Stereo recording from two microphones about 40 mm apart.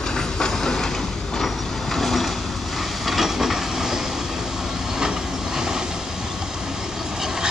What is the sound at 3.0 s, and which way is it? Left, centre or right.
Train, centre.